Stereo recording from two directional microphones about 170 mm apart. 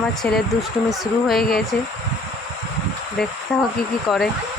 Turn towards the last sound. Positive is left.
turn(degrees=0)  # may be behind; listen again after turning